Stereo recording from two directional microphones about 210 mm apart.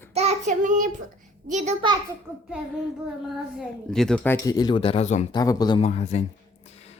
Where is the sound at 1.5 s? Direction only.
35° right (ahead or behind).